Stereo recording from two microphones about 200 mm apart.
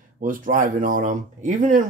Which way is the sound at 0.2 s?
40° right (ahead or behind).